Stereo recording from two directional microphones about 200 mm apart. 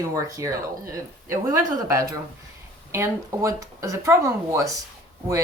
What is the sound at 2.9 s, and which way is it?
Speech, 15° right (ahead or behind).